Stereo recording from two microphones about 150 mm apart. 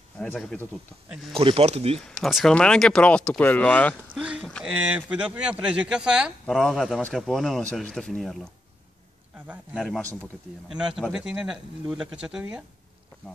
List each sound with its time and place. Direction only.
0.2 s speech: 5° left (ahead or behind)
1.3 s speech: 40° right (ahead or behind)
2.0 s speech: 5° left (ahead or behind)
4.1 s a sound: 5° right (ahead or behind)
4.6 s speech: 10° right (ahead or behind)
9.8 s speech: 5° left (ahead or behind)